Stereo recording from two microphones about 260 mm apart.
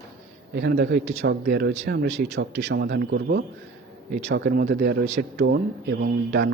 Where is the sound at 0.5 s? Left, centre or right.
Right.